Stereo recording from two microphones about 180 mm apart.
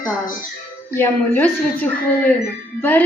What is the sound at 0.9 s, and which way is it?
A woman's voice, 10° left (ahead or behind).